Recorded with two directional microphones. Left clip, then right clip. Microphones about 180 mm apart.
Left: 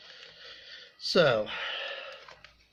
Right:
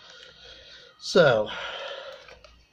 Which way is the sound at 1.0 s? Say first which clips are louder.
Right 5 dB; centre (ahead or behind).